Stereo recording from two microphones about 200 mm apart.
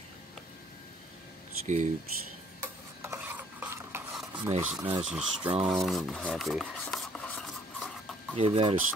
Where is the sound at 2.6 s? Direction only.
15° right (ahead or behind).